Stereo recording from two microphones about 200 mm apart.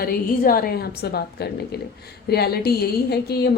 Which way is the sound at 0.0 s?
45° left (ahead or behind).